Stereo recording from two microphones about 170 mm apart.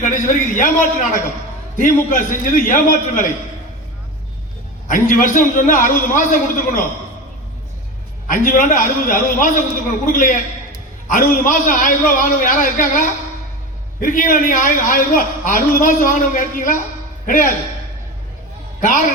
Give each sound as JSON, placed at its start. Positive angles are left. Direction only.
{"t": 0.0, "sound": "a man's voice", "side_deg": 50}
{"t": 4.9, "sound": "a man's voice", "side_deg": 50}
{"t": 8.3, "sound": "a man's voice", "side_deg": 55}
{"t": 18.8, "sound": "a man's voice", "side_deg": 50}